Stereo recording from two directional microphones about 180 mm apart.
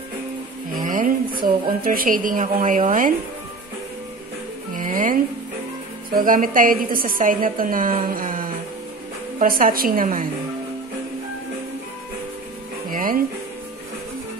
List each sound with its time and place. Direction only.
0.7 s a woman's voice: 50° right (ahead or behind)
4.7 s music: 50° right (ahead or behind)
6.0 s a woman's voice: 50° right (ahead or behind)
12.9 s music: 50° right (ahead or behind)